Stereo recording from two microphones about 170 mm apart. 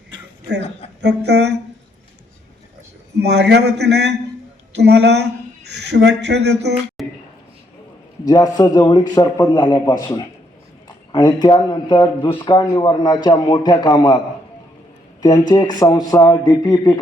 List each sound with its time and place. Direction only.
1.0 s a man's voice: 80° right
3.2 s a man's voice: 80° right
7.0 s a sound: centre (ahead or behind)
8.3 s a man's voice: 20° left (ahead or behind)
15.2 s a man's voice: 20° left (ahead or behind)